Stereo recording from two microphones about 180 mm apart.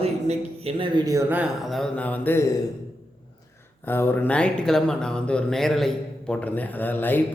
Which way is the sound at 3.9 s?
10° left (ahead or behind).